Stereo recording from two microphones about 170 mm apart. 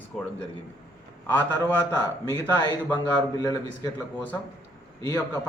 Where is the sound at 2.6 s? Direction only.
25° left (ahead or behind).